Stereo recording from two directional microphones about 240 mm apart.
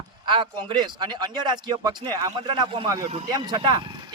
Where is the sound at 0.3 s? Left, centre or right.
Centre.